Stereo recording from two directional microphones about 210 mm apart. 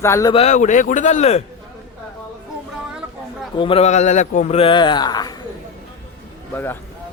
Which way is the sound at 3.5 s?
25° left (ahead or behind).